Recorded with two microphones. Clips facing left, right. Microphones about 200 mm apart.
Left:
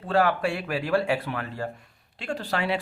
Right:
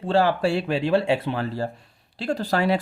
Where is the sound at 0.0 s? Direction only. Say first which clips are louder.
Right 3 dB; 30° right (ahead or behind).